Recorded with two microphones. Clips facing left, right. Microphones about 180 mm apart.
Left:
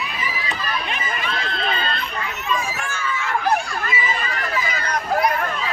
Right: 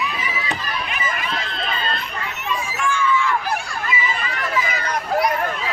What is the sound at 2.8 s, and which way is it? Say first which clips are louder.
Chatter: right 7 dB; 45° left (ahead or behind).